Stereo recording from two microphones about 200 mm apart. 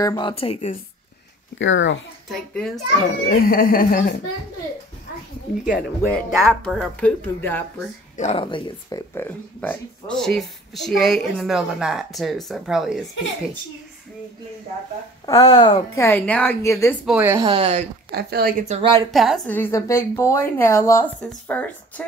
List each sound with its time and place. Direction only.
0.0 s a woman's voice: 15° left (ahead or behind)
0.3 s speech: 30° left (ahead or behind)
1.6 s speech: 70° left (ahead or behind)
2.2 s speech: centre (ahead or behind)
3.3 s speech: 45° left (ahead or behind)
5.7 s speech: centre (ahead or behind)
8.2 s speech: 30° left (ahead or behind)
9.1 s speech: 10° left (ahead or behind)
15.2 s a woman's voice: 20° left (ahead or behind)
17.2 s speech: 15° right (ahead or behind)
17.5 s speech: 30° right (ahead or behind)
18.1 s speech: 50° right (ahead or behind)
18.7 s speech: 25° right (ahead or behind)
19.1 s a woman's voice: centre (ahead or behind)